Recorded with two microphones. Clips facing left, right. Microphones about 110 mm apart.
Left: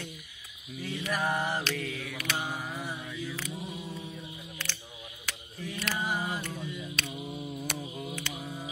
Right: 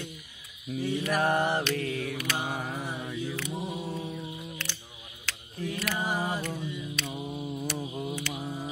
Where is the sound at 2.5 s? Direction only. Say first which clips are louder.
Right 3 dB; 60° right (ahead or behind).